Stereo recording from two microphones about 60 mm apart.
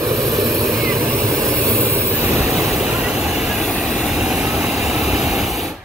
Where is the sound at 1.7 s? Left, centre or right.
Right.